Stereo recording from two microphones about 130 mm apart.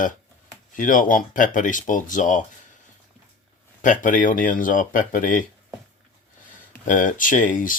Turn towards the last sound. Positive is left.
turn(degrees=90)